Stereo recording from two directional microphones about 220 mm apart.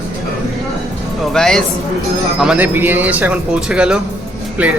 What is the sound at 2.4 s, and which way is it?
A man's voice, 5° right (ahead or behind).